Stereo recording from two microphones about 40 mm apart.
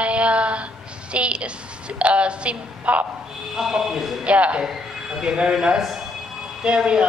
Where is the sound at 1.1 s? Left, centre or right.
Right.